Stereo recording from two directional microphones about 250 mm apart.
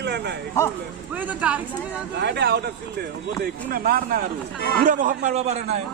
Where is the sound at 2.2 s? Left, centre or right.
Right.